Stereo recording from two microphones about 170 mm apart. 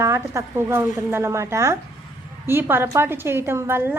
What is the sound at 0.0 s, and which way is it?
A woman's voice, 15° right (ahead or behind).